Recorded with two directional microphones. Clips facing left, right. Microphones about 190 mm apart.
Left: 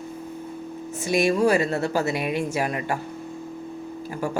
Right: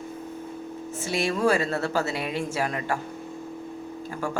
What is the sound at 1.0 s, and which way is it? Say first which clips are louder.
Speech: left 4 dB; 15° left (ahead or behind).